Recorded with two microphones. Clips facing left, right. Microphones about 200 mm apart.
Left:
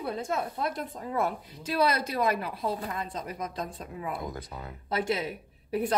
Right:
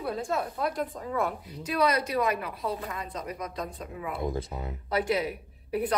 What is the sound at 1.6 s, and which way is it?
A woman's voice, 30° left (ahead or behind).